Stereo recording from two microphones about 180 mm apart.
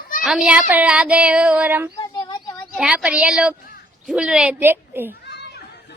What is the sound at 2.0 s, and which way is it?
Child singing, 25° left (ahead or behind).